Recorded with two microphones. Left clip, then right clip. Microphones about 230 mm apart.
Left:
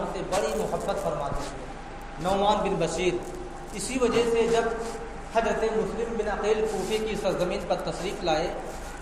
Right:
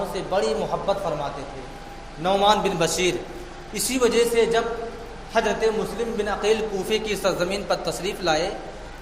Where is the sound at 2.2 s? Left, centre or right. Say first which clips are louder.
Right 5 dB; right.